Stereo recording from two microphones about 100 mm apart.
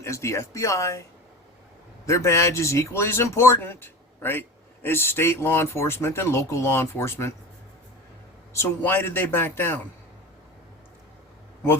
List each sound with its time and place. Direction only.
0.0 s speech: 30° left (ahead or behind)
2.0 s speech: 30° left (ahead or behind)
8.5 s speech: 20° left (ahead or behind)